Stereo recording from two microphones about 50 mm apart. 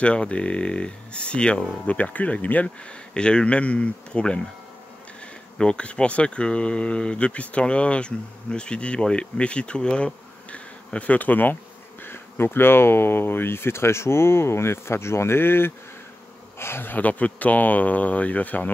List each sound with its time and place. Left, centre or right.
0.0 s speech: left
5.6 s speech: centre; by 11.5 s left
12.0 s speech: left
16.9 s speech: left